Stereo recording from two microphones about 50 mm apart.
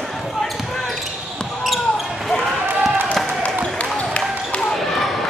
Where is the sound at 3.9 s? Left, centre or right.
Left.